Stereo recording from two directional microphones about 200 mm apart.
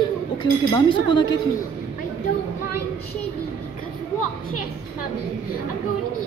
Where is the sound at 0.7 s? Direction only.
20° left (ahead or behind).